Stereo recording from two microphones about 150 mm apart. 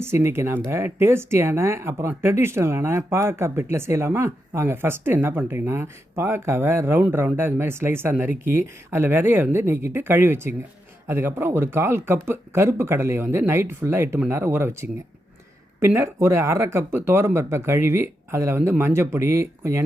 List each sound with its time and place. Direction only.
0.0 s speech: 15° right (ahead or behind)